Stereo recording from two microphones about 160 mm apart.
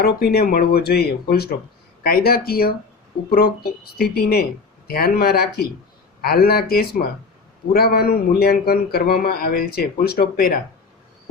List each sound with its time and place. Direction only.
0.0 s a man's voice: 70° left (ahead or behind)